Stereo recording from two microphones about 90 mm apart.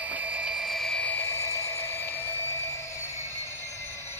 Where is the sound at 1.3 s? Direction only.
30° left (ahead or behind).